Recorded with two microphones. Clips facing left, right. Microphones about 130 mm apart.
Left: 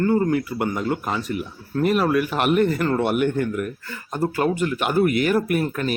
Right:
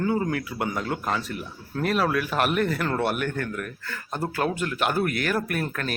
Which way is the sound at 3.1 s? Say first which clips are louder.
Left 6 dB; 20° left (ahead or behind).